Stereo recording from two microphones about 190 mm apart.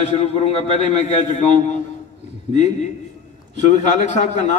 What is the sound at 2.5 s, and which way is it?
A man's voice, 40° left (ahead or behind).